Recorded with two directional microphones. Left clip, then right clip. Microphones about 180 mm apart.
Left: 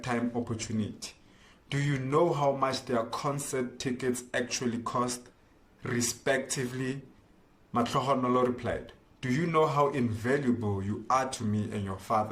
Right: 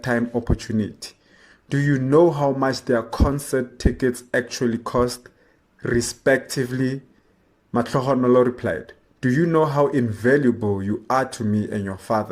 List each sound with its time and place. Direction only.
0.0 s a man's voice: 45° right (ahead or behind)